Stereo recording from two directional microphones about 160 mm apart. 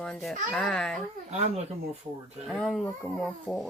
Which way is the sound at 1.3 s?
40° right (ahead or behind).